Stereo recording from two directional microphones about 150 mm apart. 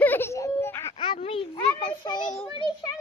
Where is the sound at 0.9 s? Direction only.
35° left (ahead or behind).